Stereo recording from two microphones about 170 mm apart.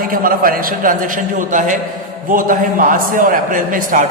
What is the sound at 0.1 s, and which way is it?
A man's voice, 55° right (ahead or behind).